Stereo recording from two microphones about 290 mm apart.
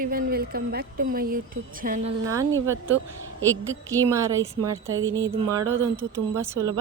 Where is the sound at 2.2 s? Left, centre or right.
Centre.